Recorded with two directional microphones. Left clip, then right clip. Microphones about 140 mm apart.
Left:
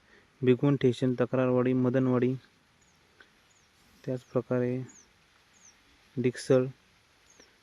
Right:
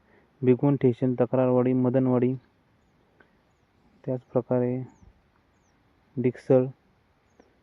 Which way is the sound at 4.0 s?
10° left (ahead or behind).